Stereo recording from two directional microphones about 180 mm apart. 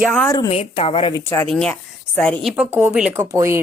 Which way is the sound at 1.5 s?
5° left (ahead or behind).